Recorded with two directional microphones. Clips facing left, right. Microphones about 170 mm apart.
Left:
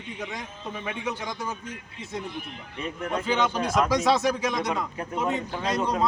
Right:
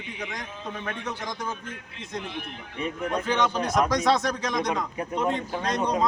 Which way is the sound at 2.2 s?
75° right (ahead or behind).